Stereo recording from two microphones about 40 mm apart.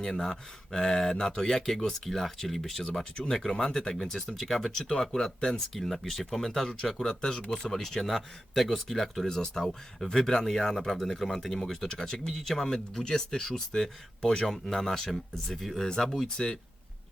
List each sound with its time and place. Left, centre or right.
0.0 s speech: centre
4.3 s speech: centre
4.8 s speech: centre
5.7 s speech: centre
6.8 s speech: centre